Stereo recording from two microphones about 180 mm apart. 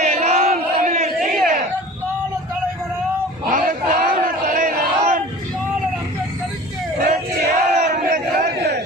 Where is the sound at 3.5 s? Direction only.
50° right (ahead or behind).